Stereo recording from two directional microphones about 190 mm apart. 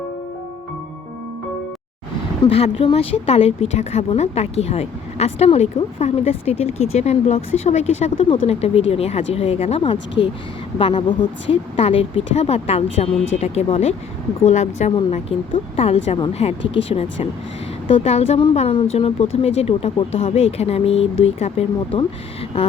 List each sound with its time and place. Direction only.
2.4 s a woman's voice: 30° left (ahead or behind)